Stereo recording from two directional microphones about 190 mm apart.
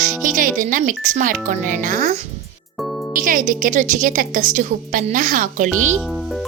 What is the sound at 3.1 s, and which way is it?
Speech, 45° right (ahead or behind).